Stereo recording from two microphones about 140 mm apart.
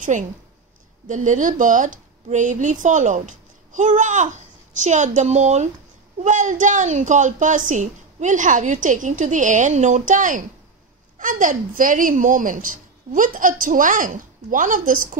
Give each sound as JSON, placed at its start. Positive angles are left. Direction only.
{"t": 1.0, "sound": "a woman's voice", "side_deg": -65}